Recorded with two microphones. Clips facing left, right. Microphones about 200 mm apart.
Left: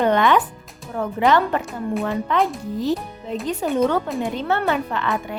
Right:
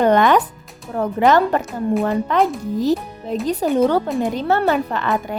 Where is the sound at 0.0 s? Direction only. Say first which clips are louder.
Right 3 dB; 45° right (ahead or behind).